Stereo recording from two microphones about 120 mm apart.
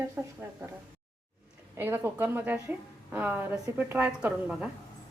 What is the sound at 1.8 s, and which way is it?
A woman's voice, 20° right (ahead or behind).